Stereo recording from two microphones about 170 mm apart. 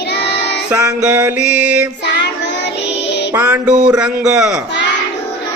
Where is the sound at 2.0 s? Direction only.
90° left.